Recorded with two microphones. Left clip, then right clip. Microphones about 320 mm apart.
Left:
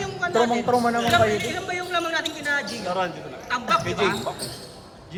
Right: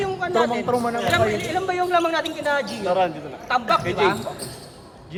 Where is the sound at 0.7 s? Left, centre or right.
Left.